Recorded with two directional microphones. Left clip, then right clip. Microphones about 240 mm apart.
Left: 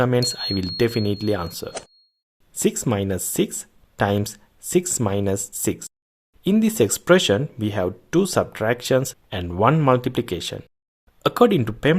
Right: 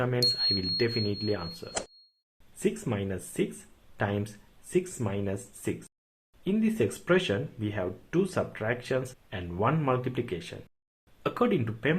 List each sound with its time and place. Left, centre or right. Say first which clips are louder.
0.0 s speech: left 5 dB; left